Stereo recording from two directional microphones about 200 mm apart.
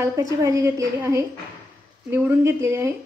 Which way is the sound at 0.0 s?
15° right (ahead or behind).